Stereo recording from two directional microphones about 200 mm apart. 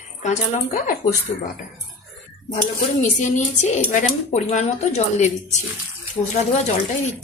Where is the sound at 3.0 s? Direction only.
35° left (ahead or behind).